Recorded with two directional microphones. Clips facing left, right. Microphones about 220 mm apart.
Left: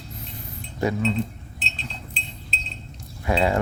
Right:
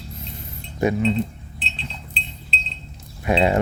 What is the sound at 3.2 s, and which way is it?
Speech, 20° right (ahead or behind).